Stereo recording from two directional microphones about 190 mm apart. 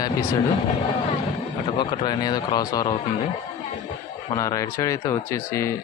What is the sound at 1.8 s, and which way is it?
Speech, 25° left (ahead or behind).